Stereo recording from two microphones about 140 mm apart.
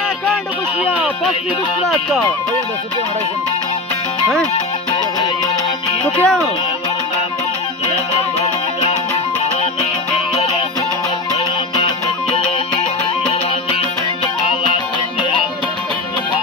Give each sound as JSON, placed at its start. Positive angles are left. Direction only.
{"t": 1.9, "sound": "speech", "side_deg": 0}
{"t": 6.0, "sound": "speech", "side_deg": 5}
{"t": 8.1, "sound": "music", "side_deg": 45}
{"t": 13.3, "sound": "music", "side_deg": 45}